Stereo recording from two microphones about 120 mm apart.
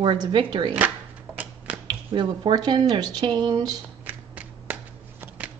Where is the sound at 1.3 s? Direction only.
10° right (ahead or behind).